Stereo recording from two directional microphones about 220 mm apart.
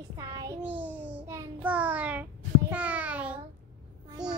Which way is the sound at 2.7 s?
5° right (ahead or behind).